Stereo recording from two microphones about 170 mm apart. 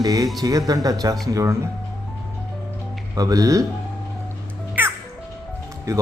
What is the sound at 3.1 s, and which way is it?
Speech, 20° right (ahead or behind).